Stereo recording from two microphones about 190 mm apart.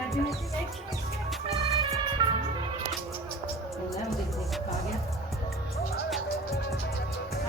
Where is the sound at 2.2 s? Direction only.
20° right (ahead or behind).